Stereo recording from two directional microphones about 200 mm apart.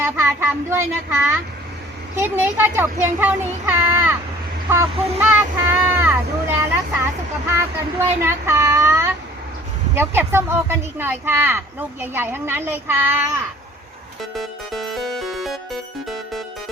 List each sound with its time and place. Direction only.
0.0 s speech: 10° right (ahead or behind)
14.2 s music: centre (ahead or behind)